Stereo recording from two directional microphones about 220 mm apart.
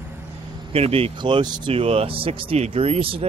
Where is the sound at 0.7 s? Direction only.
25° right (ahead or behind).